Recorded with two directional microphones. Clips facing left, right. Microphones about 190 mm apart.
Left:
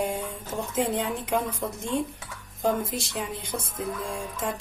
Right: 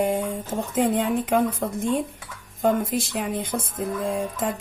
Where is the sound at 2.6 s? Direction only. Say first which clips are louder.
Right 5 dB; 50° right (ahead or behind).